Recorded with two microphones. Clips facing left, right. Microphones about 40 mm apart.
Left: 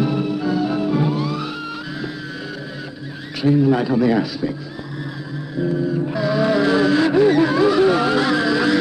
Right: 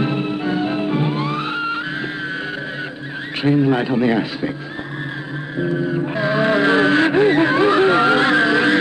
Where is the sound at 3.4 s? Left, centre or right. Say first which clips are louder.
Even; right.